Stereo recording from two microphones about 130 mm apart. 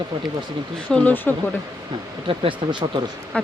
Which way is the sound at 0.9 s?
10° left (ahead or behind).